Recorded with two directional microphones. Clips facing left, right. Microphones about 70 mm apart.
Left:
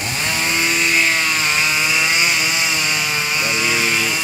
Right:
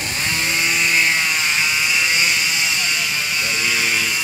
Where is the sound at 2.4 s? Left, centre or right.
Left; by 4.2 s centre.